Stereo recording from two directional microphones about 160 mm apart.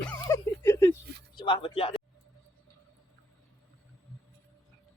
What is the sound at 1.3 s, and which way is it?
Speech, 30° left (ahead or behind).